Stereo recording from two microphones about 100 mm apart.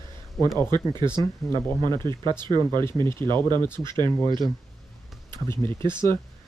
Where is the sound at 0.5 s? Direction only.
45° right (ahead or behind).